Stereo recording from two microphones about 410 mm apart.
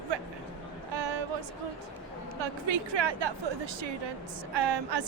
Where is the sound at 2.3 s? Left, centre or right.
Right.